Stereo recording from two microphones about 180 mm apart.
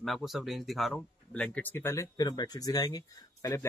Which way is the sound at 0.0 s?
Centre (ahead or behind).